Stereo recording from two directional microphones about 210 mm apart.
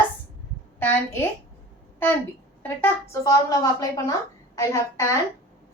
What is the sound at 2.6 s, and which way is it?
A woman's voice, 10° left (ahead or behind).